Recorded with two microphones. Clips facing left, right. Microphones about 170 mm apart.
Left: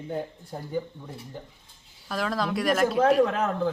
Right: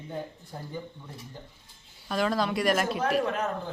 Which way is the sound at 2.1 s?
Centre (ahead or behind).